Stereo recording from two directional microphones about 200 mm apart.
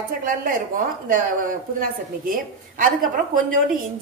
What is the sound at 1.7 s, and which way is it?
A woman's voice, 45° right (ahead or behind).